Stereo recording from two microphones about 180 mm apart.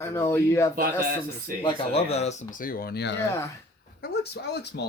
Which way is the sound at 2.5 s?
50° left (ahead or behind).